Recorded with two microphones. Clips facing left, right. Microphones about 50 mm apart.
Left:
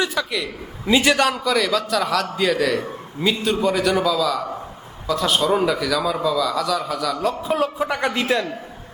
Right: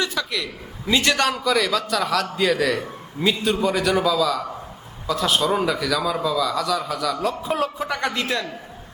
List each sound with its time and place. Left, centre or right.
0.0 s a man's voice: centre
7.9 s a man's voice: centre